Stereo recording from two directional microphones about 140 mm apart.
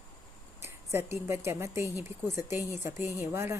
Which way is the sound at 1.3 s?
20° right (ahead or behind).